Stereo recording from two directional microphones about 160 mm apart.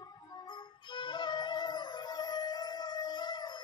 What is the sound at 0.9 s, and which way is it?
Music, 30° left (ahead or behind).